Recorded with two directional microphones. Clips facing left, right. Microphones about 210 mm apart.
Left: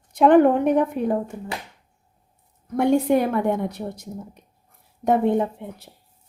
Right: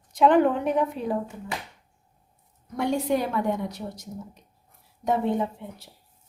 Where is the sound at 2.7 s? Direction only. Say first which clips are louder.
Left 6 dB; 55° left (ahead or behind).